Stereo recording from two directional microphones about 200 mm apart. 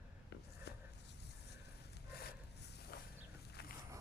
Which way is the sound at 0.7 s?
55° left (ahead or behind).